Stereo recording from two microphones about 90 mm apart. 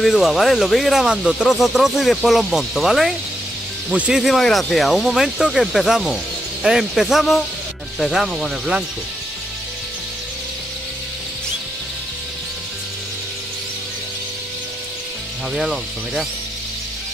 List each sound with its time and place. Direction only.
0.0 s speech: centre (ahead or behind)
3.9 s speech: 15° right (ahead or behind)
4.2 s speech: centre (ahead or behind)
15.5 s speech: 5° right (ahead or behind)